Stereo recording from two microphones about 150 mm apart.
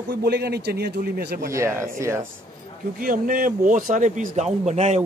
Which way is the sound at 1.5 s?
20° right (ahead or behind).